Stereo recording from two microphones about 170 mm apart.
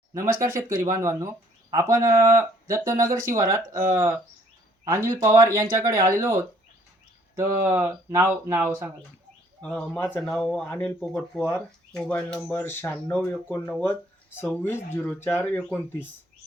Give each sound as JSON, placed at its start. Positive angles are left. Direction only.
{"t": 0.1, "sound": "speech", "side_deg": -15}
{"t": 4.9, "sound": "speech", "side_deg": -20}
{"t": 9.6, "sound": "speech", "side_deg": 5}